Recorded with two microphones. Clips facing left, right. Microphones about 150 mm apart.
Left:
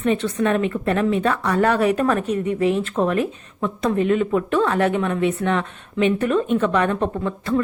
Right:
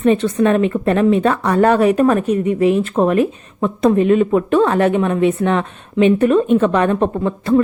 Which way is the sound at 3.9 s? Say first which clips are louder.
Right 6 dB; 20° right (ahead or behind).